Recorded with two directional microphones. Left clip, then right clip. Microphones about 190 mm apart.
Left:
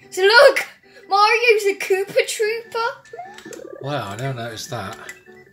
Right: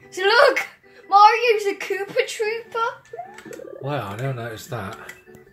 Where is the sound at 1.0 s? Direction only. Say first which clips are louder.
Right 1 dB; 70° left (ahead or behind).